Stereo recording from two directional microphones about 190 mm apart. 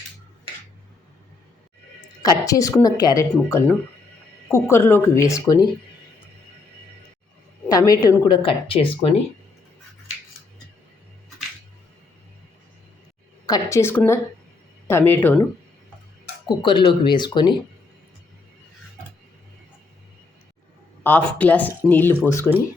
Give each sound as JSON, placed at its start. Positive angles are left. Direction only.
{"t": 2.4, "sound": "a woman's voice", "side_deg": 15}
{"t": 7.7, "sound": "a woman's voice", "side_deg": 20}
{"t": 13.5, "sound": "a woman's voice", "side_deg": 15}
{"t": 16.5, "sound": "a woman's voice", "side_deg": 25}
{"t": 21.0, "sound": "a woman's voice", "side_deg": 10}